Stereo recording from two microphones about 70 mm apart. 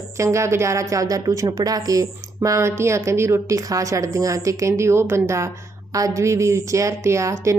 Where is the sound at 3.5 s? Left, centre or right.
Right.